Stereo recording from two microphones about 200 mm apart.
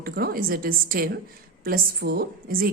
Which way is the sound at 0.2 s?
50° right (ahead or behind).